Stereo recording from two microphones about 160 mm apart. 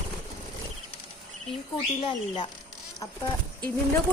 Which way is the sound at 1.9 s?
30° left (ahead or behind).